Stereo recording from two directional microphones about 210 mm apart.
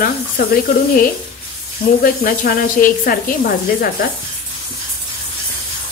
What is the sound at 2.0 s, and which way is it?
Speech, 40° left (ahead or behind).